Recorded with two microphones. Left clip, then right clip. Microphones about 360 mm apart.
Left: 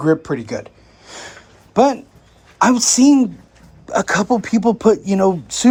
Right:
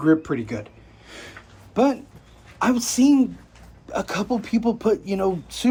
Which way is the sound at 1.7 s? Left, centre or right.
Left.